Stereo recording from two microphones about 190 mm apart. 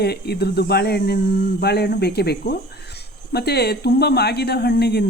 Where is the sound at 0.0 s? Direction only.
55° left (ahead or behind).